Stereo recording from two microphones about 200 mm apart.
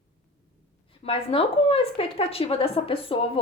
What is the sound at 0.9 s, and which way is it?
A woman's voice, 25° left (ahead or behind).